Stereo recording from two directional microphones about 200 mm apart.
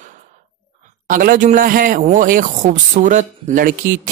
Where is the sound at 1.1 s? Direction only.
45° right (ahead or behind).